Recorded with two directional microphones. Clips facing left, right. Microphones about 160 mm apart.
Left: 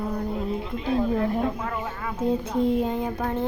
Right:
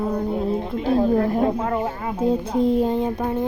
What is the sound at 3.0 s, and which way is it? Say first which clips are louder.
Speech: right 4 dB; 15° right (ahead or behind).